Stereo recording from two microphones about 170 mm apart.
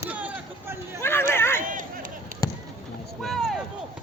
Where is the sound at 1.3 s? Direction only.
15° left (ahead or behind).